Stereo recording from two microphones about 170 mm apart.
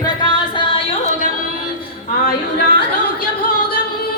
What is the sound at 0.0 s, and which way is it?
Music, 25° left (ahead or behind).